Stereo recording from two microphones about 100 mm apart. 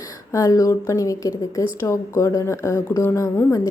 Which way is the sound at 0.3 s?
35° left (ahead or behind).